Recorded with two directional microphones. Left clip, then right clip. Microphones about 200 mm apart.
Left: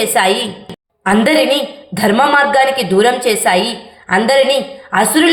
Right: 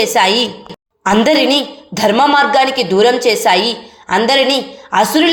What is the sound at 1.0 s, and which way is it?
A woman's voice, 35° right (ahead or behind).